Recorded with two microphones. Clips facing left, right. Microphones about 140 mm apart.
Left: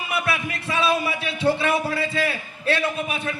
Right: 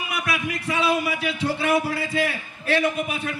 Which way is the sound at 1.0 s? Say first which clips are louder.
Left 3 dB; 25° left (ahead or behind).